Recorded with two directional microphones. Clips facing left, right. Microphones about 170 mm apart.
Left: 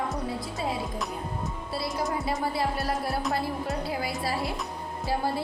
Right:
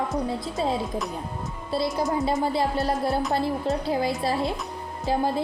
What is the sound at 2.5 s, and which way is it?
A woman's voice, 20° right (ahead or behind).